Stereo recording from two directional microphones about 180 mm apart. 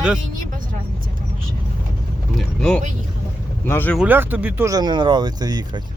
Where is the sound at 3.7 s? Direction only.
10° left (ahead or behind).